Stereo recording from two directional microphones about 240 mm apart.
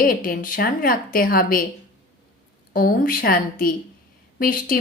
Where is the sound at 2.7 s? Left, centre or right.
Left.